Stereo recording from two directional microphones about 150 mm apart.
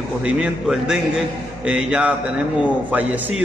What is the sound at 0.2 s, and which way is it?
A man's voice, 5° right (ahead or behind).